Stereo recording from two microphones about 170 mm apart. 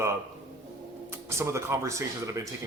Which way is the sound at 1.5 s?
15° right (ahead or behind).